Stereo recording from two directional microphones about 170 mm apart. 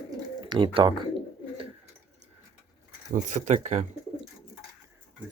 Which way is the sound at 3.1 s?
45° right (ahead or behind).